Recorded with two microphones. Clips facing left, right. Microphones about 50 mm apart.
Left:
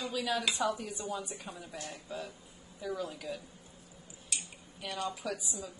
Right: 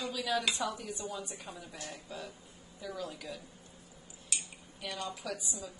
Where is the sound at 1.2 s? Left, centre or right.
Centre.